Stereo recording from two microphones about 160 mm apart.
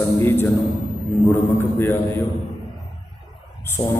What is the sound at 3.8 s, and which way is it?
Speech, 20° left (ahead or behind).